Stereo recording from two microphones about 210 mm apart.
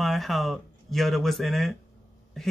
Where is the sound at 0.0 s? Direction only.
Centre (ahead or behind).